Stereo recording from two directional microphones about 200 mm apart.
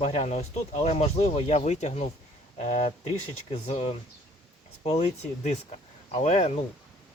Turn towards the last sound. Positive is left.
turn(degrees=35)  # may be behind; listen again after turning